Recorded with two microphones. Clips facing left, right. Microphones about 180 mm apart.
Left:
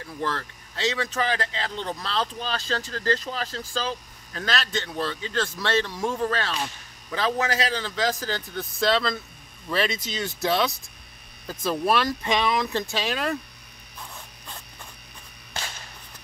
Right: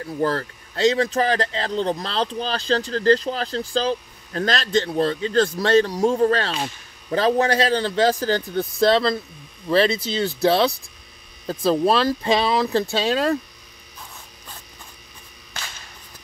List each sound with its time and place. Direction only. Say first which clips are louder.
0.0 s speech: right 7 dB; 40° right (ahead or behind)